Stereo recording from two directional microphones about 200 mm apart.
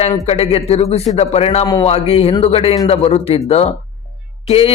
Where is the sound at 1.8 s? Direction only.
30° left (ahead or behind).